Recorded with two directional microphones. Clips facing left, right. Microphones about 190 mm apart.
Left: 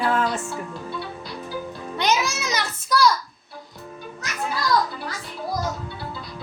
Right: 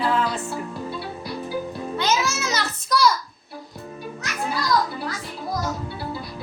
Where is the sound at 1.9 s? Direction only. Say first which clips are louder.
Left 1 dB; 15° left (ahead or behind).